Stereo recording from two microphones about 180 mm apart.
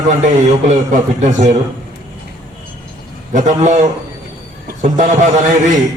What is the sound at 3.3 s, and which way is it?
A man's voice, 45° right (ahead or behind).